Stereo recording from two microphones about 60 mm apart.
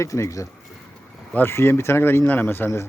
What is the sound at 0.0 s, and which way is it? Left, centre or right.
Speech, left.